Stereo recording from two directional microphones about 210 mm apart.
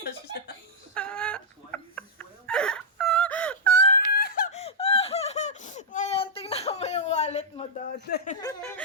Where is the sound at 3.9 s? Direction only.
45° left (ahead or behind).